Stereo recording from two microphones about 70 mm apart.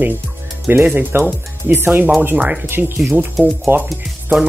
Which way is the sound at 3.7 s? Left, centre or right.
Right.